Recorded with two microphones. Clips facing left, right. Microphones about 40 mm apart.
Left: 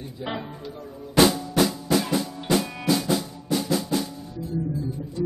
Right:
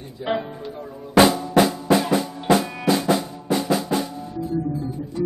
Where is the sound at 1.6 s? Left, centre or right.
Right.